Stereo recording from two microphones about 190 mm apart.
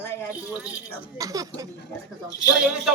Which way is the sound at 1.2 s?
20° right (ahead or behind).